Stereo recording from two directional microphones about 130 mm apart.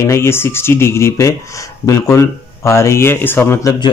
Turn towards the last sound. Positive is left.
turn(degrees=20)  # may be behind; listen again after turning